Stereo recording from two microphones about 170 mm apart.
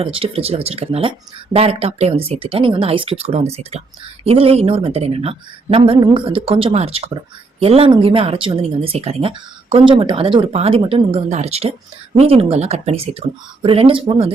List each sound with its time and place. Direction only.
0.0 s speech: 35° right (ahead or behind)